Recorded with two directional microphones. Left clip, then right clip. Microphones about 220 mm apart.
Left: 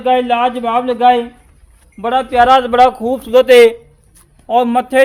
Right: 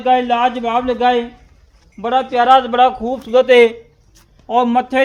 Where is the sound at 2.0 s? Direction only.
40° left (ahead or behind).